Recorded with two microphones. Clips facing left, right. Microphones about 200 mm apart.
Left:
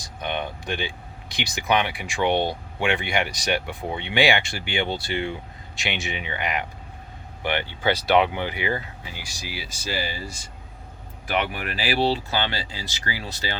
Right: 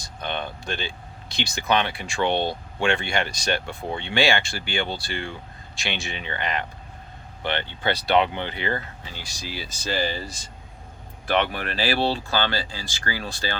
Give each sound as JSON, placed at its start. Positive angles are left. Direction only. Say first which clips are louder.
{"t": 0.0, "sound": "speech", "louder": "left 1 dB", "side_deg": 15}
{"t": 11.5, "sound": "speech", "louder": "right 1 dB", "side_deg": 10}